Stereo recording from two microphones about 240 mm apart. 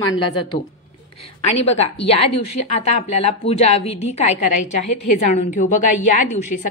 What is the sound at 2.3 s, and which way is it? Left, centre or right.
Speech, left.